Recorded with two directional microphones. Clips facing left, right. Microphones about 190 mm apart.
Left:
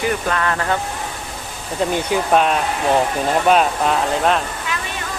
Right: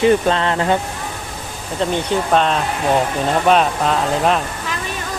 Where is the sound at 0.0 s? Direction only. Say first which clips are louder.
Right 6 dB; 25° right (ahead or behind).